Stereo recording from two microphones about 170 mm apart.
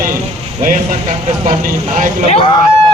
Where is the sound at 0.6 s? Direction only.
50° right (ahead or behind).